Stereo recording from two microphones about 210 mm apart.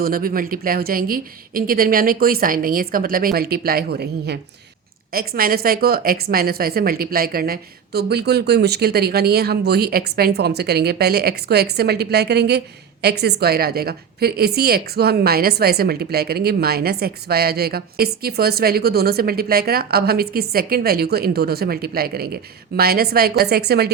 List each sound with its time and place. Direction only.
0.0 s a woman's voice: 45° right (ahead or behind)